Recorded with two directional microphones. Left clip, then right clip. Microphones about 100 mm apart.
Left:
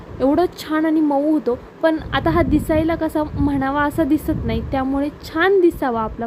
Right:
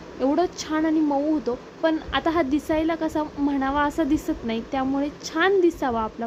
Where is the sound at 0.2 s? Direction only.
35° left (ahead or behind).